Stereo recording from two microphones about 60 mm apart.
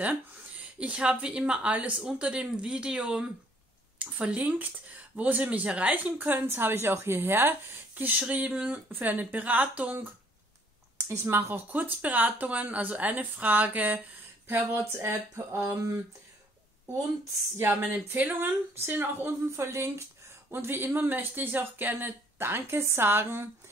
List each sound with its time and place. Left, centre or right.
0.7 s speech: centre
11.0 s speech: right
14.5 s a sound: right
17.8 s speech: right
19.5 s a sound: right
20.5 s speech: right